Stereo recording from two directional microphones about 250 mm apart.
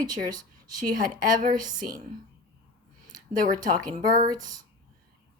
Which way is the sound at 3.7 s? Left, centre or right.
Right.